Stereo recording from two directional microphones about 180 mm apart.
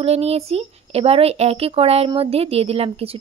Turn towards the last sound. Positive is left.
turn(degrees=-35)  # may be behind; listen again after turning